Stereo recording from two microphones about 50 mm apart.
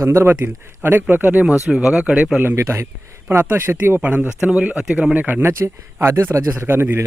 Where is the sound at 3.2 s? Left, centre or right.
Right.